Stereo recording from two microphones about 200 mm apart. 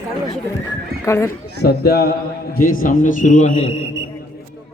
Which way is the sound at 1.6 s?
50° left (ahead or behind).